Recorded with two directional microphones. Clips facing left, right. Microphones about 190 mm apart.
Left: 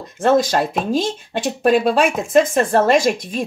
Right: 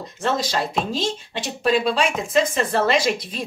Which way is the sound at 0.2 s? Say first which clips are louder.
Left 8 dB; 50° left (ahead or behind).